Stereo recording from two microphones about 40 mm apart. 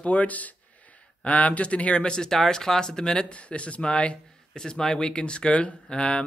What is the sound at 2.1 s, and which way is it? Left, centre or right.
Speech, centre.